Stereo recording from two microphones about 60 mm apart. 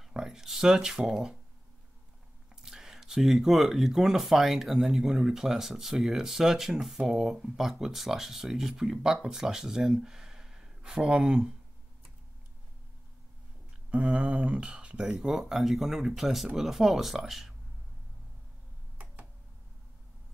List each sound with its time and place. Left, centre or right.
0.0 s speech: centre
2.5 s speech: centre
13.8 s speech: centre